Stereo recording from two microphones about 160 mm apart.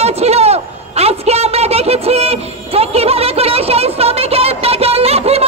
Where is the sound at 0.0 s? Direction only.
40° right (ahead or behind).